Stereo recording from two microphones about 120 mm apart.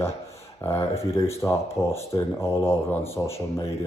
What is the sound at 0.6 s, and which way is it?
Speech, 20° left (ahead or behind).